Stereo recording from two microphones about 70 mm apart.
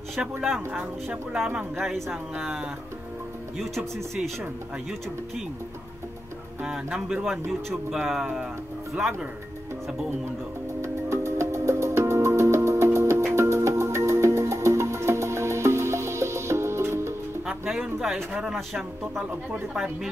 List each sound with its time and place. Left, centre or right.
0.1 s speech: centre
2.3 s speech: centre
3.5 s speech: centre
6.6 s speech: centre
10.8 s music: right
17.5 s music: centre
17.9 s speech: centre